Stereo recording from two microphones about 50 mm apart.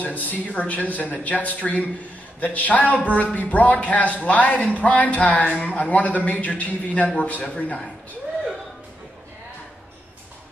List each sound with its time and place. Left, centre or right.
0.0 s speech: left